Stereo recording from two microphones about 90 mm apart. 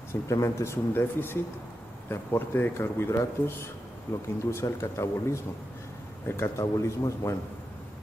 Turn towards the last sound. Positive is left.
turn(degrees=35)  # may be behind; listen again after turning